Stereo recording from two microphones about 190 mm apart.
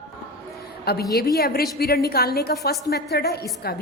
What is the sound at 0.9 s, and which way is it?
A woman's voice, 55° left (ahead or behind).